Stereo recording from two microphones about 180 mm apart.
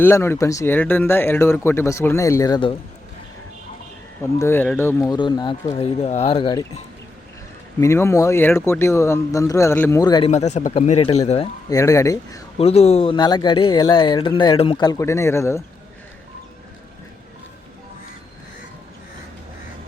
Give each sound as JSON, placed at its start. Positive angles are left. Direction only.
{"t": 0.0, "sound": "speech", "side_deg": 15}
{"t": 4.2, "sound": "speech", "side_deg": 15}
{"t": 7.8, "sound": "speech", "side_deg": 15}
{"t": 10.3, "sound": "speech", "side_deg": 40}
{"t": 11.7, "sound": "speech", "side_deg": 20}
{"t": 12.5, "sound": "speech", "side_deg": 35}